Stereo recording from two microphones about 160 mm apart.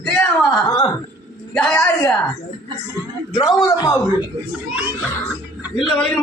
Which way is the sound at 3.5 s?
20° left (ahead or behind).